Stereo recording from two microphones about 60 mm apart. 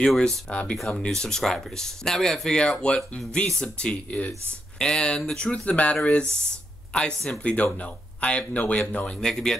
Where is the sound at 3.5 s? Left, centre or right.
Centre.